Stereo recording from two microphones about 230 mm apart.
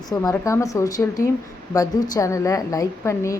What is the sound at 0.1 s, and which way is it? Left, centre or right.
A woman's voice, centre.